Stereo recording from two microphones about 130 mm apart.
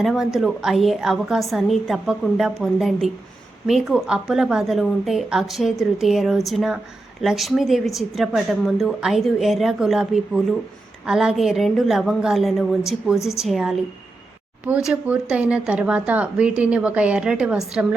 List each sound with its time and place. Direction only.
0.0 s a woman's voice: 5° right (ahead or behind)